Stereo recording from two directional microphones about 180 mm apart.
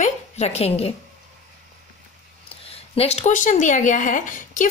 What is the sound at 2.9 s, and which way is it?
A woman's voice, 35° left (ahead or behind).